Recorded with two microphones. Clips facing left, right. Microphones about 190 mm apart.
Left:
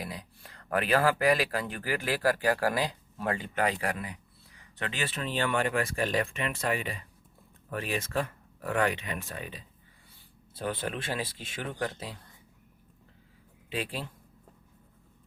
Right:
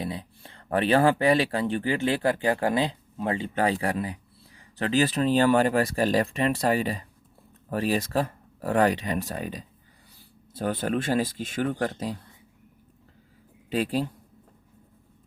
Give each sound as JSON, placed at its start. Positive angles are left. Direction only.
{"t": 0.0, "sound": "speech", "side_deg": -25}
{"t": 13.7, "sound": "speech", "side_deg": -40}